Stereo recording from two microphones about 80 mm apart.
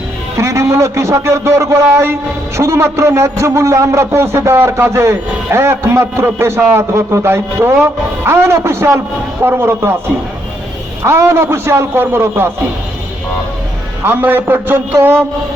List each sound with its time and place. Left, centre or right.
0.3 s a man's voice: right
11.0 s a man's voice: right
14.0 s a man's voice: right